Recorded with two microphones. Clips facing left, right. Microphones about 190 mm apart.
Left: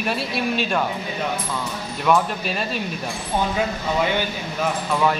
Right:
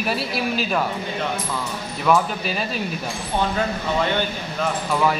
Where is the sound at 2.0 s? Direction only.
Centre (ahead or behind).